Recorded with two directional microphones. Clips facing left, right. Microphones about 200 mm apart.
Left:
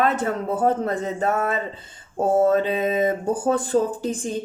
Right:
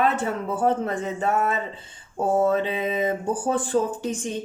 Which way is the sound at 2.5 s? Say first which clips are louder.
Left 4 dB; 40° left (ahead or behind).